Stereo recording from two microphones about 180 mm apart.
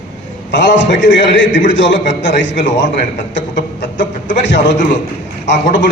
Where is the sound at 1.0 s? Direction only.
85° left.